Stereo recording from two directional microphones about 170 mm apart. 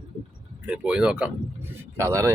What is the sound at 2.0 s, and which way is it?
Speech, 20° right (ahead or behind).